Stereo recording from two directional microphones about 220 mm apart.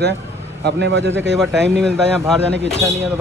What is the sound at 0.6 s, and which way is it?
Speech, 50° right (ahead or behind).